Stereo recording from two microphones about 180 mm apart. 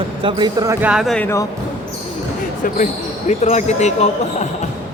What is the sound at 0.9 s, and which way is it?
Speech, centre (ahead or behind).